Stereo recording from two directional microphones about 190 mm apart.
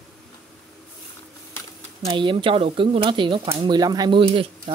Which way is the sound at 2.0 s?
25° right (ahead or behind).